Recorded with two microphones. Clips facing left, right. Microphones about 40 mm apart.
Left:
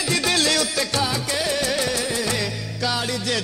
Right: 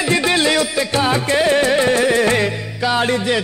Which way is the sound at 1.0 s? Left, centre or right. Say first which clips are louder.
Right 8 dB; right.